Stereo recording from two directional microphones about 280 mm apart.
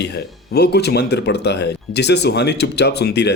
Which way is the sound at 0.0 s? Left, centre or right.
Left.